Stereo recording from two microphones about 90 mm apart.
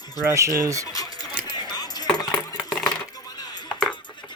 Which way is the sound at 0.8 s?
45° left (ahead or behind).